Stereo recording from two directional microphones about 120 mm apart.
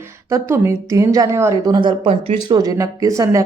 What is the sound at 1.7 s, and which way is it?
Speech, 40° right (ahead or behind).